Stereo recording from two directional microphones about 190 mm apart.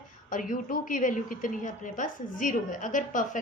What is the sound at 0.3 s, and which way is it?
A woman's voice, 45° left (ahead or behind).